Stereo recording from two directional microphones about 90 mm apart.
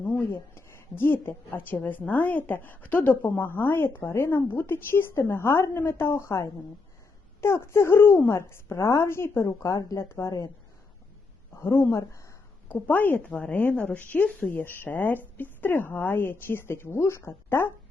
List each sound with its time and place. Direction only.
0.0 s a woman's voice: 25° left (ahead or behind)
11.6 s a woman's voice: 30° left (ahead or behind)
12.6 s a woman's voice: 20° left (ahead or behind)